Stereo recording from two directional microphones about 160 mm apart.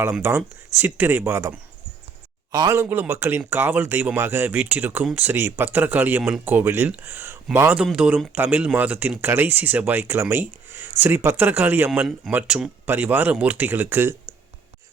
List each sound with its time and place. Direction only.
0.0 s speech: 15° right (ahead or behind)